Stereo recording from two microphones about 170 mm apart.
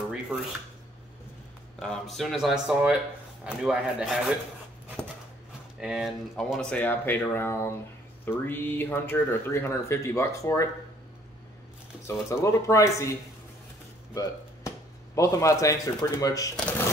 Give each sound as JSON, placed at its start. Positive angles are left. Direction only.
{"t": 1.8, "sound": "speech", "side_deg": 5}
{"t": 5.8, "sound": "speech", "side_deg": -5}
{"t": 12.1, "sound": "speech", "side_deg": 15}
{"t": 15.1, "sound": "a man's voice", "side_deg": 20}
{"t": 16.5, "sound": "speech", "side_deg": 5}